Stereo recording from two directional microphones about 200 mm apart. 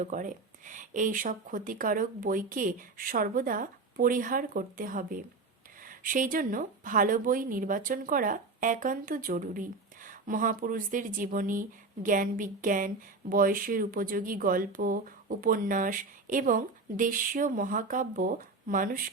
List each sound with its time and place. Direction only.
0.0 s a woman's voice: 40° right (ahead or behind)